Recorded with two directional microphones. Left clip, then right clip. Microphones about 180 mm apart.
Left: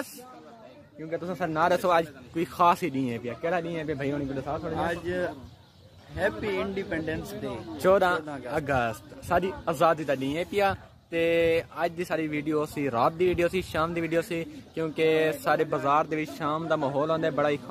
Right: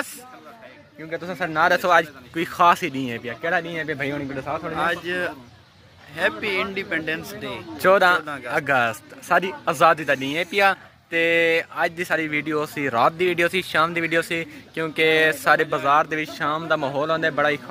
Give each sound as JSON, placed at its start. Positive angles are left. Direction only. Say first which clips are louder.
{"t": 1.1, "sound": "speech", "louder": "right 5 dB", "side_deg": 10}
{"t": 4.5, "sound": "a man's voice", "louder": "right 6 dB", "side_deg": -10}
{"t": 4.8, "sound": "speech", "louder": "right 8 dB", "side_deg": 20}
{"t": 7.8, "sound": "speech", "louder": "right 6 dB", "side_deg": -5}